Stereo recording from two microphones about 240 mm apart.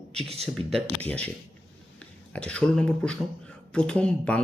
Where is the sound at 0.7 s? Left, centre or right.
Centre.